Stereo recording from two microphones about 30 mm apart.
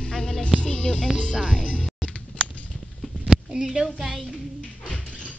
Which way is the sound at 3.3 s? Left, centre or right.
Right.